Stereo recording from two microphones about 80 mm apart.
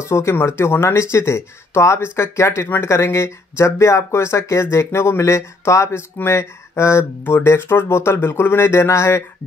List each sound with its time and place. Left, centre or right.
0.0 s speech: left